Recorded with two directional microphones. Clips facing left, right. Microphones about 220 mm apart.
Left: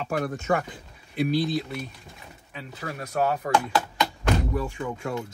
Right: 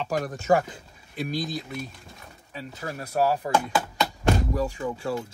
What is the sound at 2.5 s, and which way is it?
Speech, 35° right (ahead or behind).